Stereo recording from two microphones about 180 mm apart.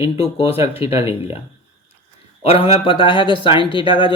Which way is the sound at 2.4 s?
30° left (ahead or behind).